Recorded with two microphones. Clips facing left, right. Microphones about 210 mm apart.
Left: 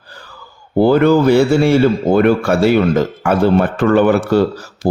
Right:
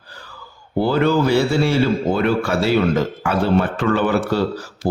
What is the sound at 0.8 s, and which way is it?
Speech, 50° left (ahead or behind).